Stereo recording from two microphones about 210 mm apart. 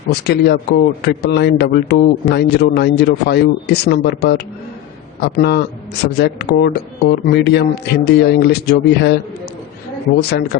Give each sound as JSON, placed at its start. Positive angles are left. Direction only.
{"t": 0.1, "sound": "a man's voice", "side_deg": 50}
{"t": 5.4, "sound": "a man's voice", "side_deg": 50}
{"t": 10.2, "sound": "a man's voice", "side_deg": 50}